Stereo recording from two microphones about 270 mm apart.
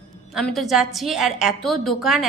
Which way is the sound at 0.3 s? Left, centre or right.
Centre.